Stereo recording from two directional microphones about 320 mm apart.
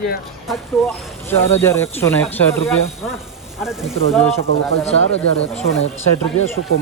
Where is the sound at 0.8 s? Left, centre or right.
Centre.